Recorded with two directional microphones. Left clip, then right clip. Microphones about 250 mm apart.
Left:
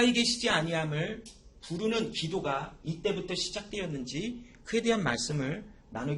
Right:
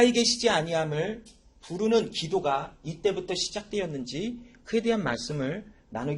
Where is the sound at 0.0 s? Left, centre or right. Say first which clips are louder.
Right 5 dB; right.